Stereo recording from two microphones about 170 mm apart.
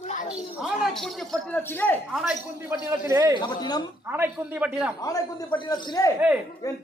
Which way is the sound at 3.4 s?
25° left (ahead or behind).